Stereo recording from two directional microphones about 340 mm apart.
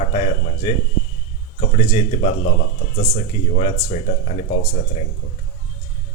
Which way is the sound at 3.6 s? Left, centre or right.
Centre.